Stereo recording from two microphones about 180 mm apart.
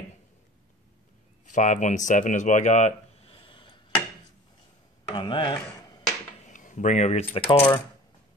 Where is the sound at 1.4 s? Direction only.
45° left (ahead or behind); by 3.8 s 30° left (ahead or behind).